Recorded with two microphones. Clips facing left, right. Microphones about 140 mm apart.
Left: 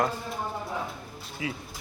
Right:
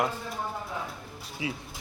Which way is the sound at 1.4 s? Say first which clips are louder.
Even; 20° right (ahead or behind).